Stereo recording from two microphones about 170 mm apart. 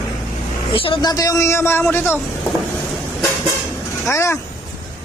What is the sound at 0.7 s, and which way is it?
A man's voice, 30° left (ahead or behind).